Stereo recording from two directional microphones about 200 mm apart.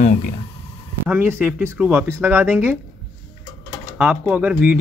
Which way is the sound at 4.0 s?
5° right (ahead or behind).